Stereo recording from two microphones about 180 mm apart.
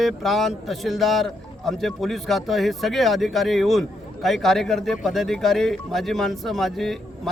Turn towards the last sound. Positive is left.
turn(degrees=0)  # may be behind; listen again after turning